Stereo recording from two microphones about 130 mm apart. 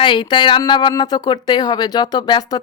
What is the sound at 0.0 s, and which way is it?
A woman's voice, 35° left (ahead or behind).